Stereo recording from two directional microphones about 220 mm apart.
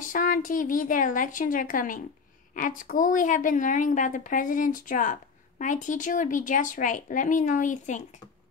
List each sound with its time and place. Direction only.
0.1 s a woman's voice: 40° left (ahead or behind)